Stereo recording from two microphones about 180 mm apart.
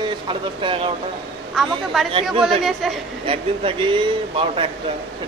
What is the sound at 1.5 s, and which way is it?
Speech, centre (ahead or behind).